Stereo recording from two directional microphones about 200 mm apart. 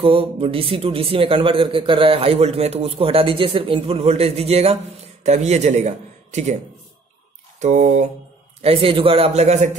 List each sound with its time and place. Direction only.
0.0 s a man's voice: 25° right (ahead or behind)
7.6 s a man's voice: 35° right (ahead or behind)